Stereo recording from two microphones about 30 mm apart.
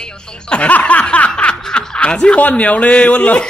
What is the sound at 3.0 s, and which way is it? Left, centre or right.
Speech, left.